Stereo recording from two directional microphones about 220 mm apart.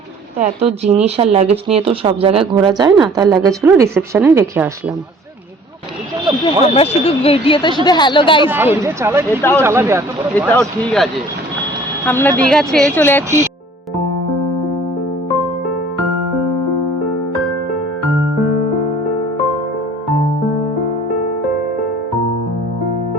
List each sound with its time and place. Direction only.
1.0 s speech: 30° right (ahead or behind); by 4.7 s 10° right (ahead or behind)
6.4 s speech: 25° left (ahead or behind)
8.4 s speech: 10° right (ahead or behind)
9.4 s speech: 10° left (ahead or behind)
9.6 s speech: 10° right (ahead or behind)
10.3 s speech: 5° left (ahead or behind)